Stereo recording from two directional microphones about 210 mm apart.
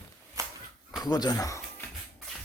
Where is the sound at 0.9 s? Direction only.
20° left (ahead or behind).